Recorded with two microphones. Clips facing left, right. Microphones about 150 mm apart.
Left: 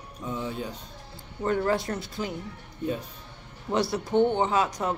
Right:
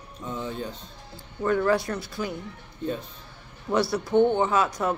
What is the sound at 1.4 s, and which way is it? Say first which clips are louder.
Speech: right 3 dB; 25° left (ahead or behind).